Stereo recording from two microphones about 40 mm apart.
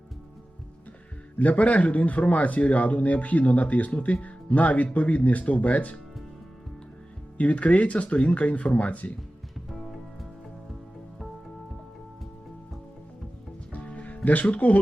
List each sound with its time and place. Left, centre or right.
1.4 s speech: left
7.3 s speech: left
13.7 s music: left
14.3 s speech: left